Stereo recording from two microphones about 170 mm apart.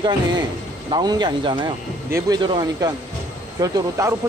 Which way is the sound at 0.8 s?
25° right (ahead or behind).